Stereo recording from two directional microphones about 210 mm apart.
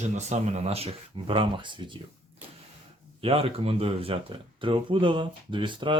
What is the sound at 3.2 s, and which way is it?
Speech, 25° right (ahead or behind).